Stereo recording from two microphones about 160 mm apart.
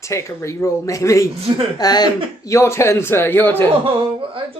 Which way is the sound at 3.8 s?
35° right (ahead or behind).